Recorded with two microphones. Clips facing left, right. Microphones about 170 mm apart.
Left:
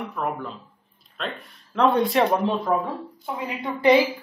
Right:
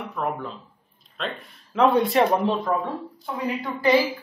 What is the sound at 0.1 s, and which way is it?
Speech, centre (ahead or behind).